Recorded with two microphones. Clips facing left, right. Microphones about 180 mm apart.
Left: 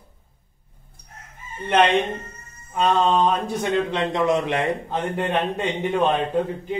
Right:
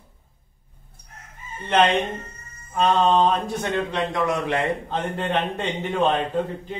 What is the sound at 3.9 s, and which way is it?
A man's voice, 20° left (ahead or behind).